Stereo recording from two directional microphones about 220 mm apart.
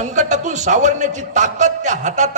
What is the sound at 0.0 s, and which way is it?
A man's voice, 35° right (ahead or behind).